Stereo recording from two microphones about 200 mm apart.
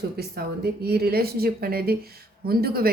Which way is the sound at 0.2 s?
50° right (ahead or behind).